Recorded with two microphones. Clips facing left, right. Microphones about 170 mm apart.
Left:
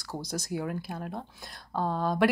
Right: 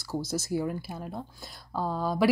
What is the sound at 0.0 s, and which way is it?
Speech, 5° right (ahead or behind).